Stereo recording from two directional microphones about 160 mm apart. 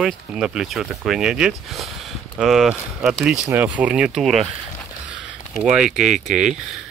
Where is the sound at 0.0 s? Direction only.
5° right (ahead or behind).